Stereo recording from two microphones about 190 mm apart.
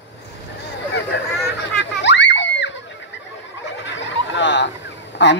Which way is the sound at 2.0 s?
70° left (ahead or behind).